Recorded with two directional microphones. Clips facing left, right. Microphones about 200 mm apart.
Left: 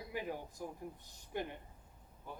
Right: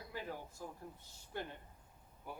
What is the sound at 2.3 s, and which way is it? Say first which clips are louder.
Speech: right 1 dB; 10° right (ahead or behind).